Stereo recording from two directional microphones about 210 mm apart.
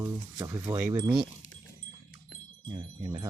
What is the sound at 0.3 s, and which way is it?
Speech, 15° right (ahead or behind).